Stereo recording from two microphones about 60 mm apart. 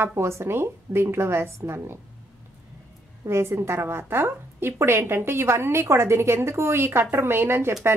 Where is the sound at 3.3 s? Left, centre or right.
Right.